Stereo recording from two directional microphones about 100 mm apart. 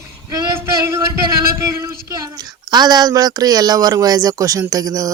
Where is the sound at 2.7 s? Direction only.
45° right (ahead or behind).